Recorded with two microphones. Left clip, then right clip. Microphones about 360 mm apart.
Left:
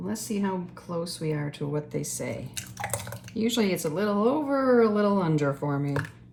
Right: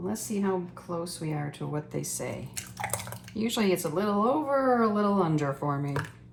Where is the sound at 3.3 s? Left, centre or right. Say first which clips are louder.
Left 1 dB; centre.